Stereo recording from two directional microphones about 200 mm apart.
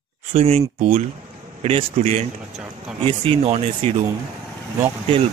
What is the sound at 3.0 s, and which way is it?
Speech, 25° right (ahead or behind).